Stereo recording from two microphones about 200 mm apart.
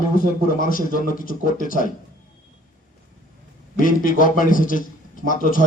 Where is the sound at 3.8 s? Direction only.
45° left (ahead or behind).